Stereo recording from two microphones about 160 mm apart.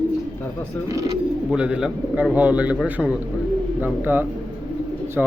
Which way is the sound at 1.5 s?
5° right (ahead or behind).